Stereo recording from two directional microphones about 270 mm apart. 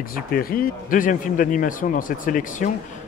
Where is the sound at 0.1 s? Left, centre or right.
Left.